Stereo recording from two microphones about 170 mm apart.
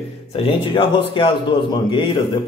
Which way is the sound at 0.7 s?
30° left (ahead or behind).